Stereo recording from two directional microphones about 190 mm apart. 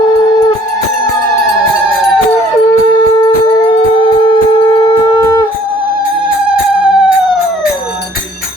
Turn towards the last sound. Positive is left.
turn(degrees=-5)  # may be behind; listen again after turning